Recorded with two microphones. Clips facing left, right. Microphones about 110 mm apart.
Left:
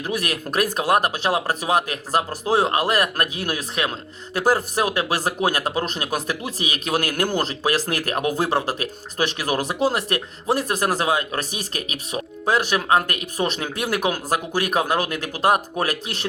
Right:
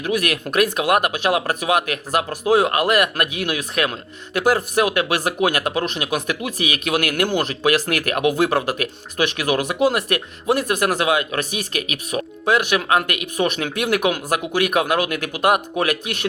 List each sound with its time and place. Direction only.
0.0 s speech: 30° left (ahead or behind)